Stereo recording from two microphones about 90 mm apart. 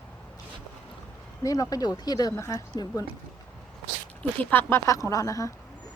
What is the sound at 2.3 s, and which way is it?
Speech, 35° left (ahead or behind).